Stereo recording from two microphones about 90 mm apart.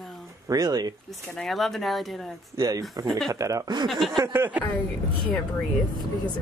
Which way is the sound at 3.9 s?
Centre (ahead or behind).